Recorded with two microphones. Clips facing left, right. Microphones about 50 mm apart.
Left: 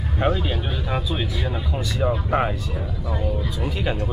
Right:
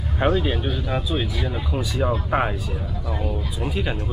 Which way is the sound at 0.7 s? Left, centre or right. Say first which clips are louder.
Right 1 dB; centre.